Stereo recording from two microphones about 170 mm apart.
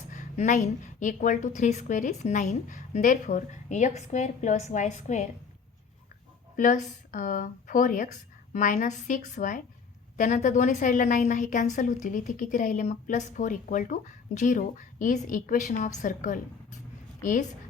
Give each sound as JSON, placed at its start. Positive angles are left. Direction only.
{"t": 0.1, "sound": "a woman's voice", "side_deg": 45}
{"t": 6.6, "sound": "a woman's voice", "side_deg": 50}